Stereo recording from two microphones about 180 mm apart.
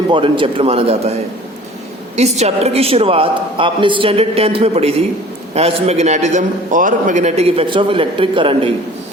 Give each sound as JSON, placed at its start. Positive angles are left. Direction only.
{"t": 0.1, "sound": "a man's voice", "side_deg": -30}
{"t": 2.1, "sound": "a man's voice", "side_deg": -35}